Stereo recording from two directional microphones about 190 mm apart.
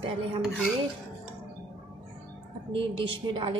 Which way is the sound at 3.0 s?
25° right (ahead or behind).